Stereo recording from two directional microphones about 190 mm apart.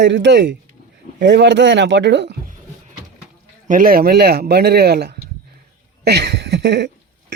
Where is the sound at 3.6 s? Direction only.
50° right (ahead or behind).